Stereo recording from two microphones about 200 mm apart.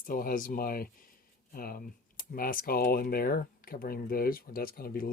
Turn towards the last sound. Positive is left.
turn(degrees=45)  # may be behind; listen again after turning